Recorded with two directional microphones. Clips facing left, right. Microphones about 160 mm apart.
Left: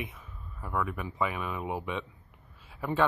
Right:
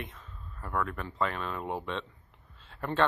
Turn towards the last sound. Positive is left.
turn(degrees=5)  # may be behind; listen again after turning